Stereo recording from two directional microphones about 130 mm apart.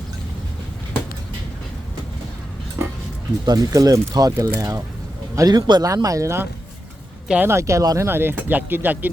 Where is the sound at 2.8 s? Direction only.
20° right (ahead or behind).